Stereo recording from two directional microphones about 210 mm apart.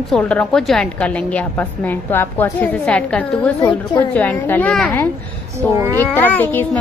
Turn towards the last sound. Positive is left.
turn(degrees=10)  # may be behind; listen again after turning